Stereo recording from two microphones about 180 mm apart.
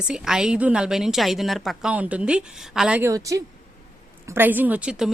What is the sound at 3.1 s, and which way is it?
A woman's voice, 20° right (ahead or behind).